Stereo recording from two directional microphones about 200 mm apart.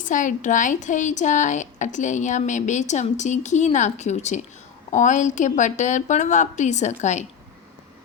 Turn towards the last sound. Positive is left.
turn(degrees=35)  # may be behind; listen again after turning